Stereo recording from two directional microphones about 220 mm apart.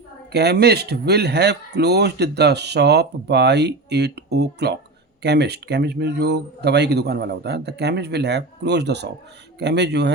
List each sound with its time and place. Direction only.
0.3 s speech: 45° right (ahead or behind)